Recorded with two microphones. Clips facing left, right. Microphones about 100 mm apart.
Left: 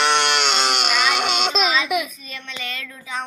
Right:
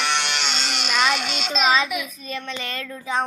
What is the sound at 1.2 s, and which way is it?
Child singing, 75° left (ahead or behind).